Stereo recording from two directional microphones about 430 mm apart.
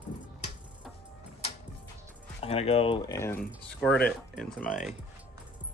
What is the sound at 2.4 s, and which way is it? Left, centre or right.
Speech, centre.